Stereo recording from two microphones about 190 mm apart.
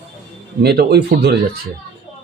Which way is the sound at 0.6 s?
55° right (ahead or behind).